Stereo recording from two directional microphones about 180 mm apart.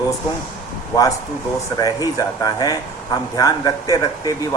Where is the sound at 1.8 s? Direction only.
20° left (ahead or behind).